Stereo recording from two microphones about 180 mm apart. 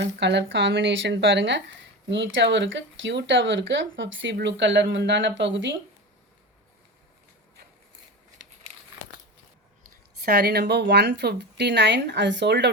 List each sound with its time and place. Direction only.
0.0 s speech: 75° right (ahead or behind)
10.2 s speech: 60° right (ahead or behind)